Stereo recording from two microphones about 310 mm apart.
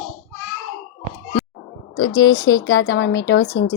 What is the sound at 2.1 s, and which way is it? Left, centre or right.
Speech, centre.